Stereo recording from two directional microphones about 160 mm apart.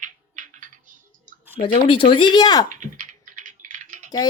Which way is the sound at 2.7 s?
55° right (ahead or behind).